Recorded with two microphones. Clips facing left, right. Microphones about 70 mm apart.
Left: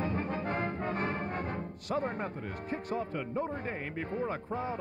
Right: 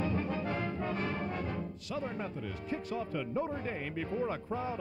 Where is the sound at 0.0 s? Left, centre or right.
Left.